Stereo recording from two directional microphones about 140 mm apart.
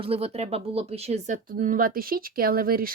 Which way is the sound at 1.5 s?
80° right.